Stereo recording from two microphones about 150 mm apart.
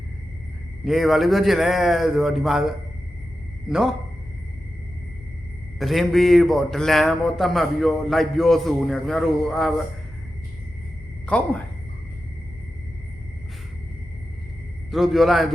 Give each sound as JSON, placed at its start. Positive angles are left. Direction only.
{"t": 0.9, "sound": "a man's voice", "side_deg": 0}
{"t": 5.8, "sound": "a man's voice", "side_deg": 0}
{"t": 11.3, "sound": "a woman's voice", "side_deg": 10}
{"t": 14.8, "sound": "a man's voice", "side_deg": 0}